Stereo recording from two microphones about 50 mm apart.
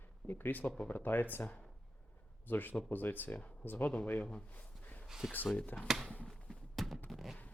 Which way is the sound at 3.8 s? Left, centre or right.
Left.